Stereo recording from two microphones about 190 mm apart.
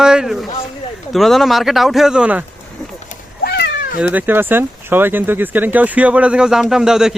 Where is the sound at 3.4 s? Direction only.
60° left (ahead or behind).